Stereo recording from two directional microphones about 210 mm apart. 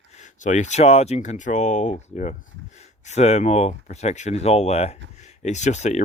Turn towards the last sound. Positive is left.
turn(degrees=35)  # may be behind; listen again after turning